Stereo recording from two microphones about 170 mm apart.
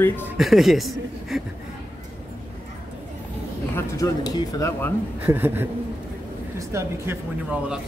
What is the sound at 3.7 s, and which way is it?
Speech, 20° left (ahead or behind).